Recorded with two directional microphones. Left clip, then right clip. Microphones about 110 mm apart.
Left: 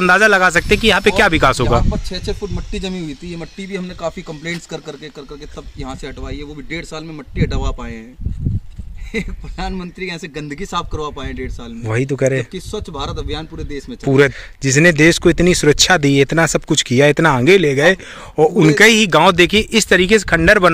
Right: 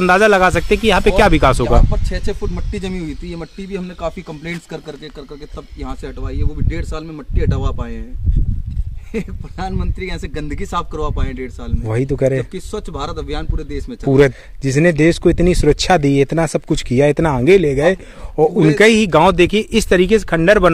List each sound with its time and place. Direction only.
0.0 s speech: centre (ahead or behind)
1.7 s speech: 20° right (ahead or behind)
2.5 s speech: centre (ahead or behind)
4.3 s speech: 30° right (ahead or behind)
5.8 s speech: 10° right (ahead or behind)
9.1 s a man's voice: centre (ahead or behind)
11.9 s speech: 20° right (ahead or behind)
12.5 s speech: 5° right (ahead or behind)
14.0 s speech: 20° right (ahead or behind)
14.6 s speech: 5° right (ahead or behind)